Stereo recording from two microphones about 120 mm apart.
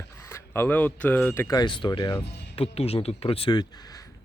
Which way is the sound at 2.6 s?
55° left (ahead or behind).